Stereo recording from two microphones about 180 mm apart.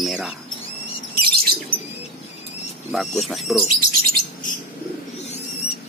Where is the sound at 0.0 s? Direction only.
Centre (ahead or behind).